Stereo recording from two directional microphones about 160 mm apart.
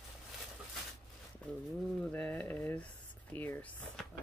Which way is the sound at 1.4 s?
5° left (ahead or behind).